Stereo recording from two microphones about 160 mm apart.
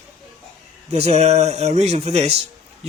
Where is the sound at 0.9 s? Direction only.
40° right (ahead or behind).